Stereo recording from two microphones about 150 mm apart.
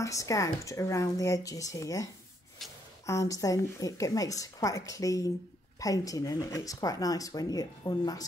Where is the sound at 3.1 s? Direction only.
20° left (ahead or behind).